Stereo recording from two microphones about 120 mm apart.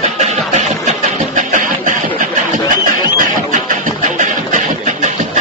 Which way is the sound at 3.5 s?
90° right.